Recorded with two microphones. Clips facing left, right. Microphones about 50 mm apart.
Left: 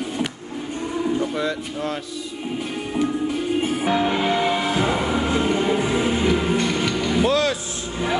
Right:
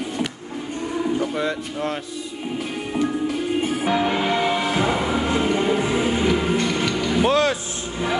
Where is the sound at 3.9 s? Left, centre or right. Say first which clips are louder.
Even; centre.